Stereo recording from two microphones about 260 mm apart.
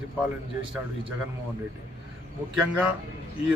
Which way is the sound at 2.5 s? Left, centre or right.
Centre.